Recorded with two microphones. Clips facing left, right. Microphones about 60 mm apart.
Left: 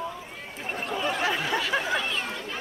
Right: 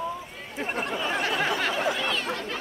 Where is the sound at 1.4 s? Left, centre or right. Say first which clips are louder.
Right 1 dB; right.